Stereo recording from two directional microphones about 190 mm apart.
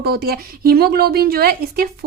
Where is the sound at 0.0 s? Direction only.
55° right (ahead or behind).